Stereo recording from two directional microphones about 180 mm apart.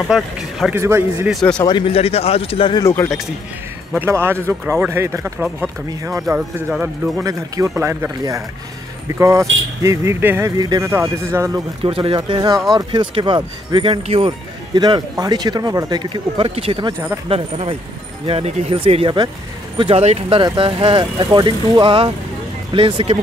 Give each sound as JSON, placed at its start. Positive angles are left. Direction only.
{"t": 0.1, "sound": "a man's voice", "side_deg": 0}
{"t": 0.7, "sound": "speech", "side_deg": -15}
{"t": 1.3, "sound": "a man's voice", "side_deg": 5}
{"t": 1.6, "sound": "speech", "side_deg": 25}
{"t": 2.8, "sound": "speech", "side_deg": 15}
{"t": 4.0, "sound": "a man's voice", "side_deg": -15}
{"t": 7.2, "sound": "speech", "side_deg": -20}
{"t": 11.8, "sound": "speech", "side_deg": -30}